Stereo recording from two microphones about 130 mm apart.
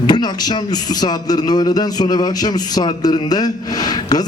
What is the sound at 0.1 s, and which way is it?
A man's voice, 35° left (ahead or behind).